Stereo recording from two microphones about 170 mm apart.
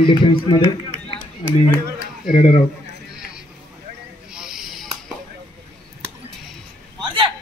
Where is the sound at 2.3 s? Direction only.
30° left (ahead or behind).